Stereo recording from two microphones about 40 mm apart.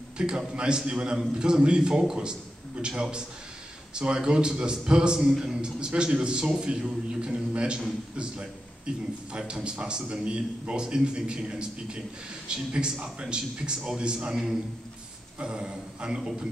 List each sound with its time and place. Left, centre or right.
0.2 s a man's voice: right
15.3 s a man's voice: right